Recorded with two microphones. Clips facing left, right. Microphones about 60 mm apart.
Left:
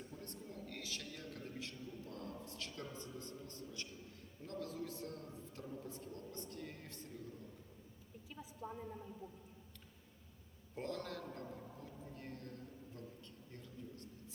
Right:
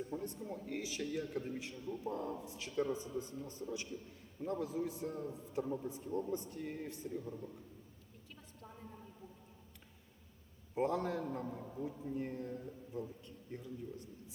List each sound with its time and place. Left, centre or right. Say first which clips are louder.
0.2 s a man's voice: right 7 dB; centre
8.3 s a sound: left 6 dB; centre
8.6 s a woman's voice: left 6 dB; centre
10.8 s a man's voice: right 9 dB; centre